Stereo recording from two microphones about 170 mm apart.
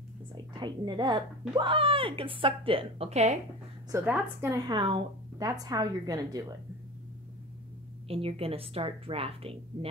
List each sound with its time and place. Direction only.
0.3 s a woman's voice: 25° right (ahead or behind)
3.9 s a woman's voice: 10° right (ahead or behind)
8.1 s a woman's voice: 35° right (ahead or behind)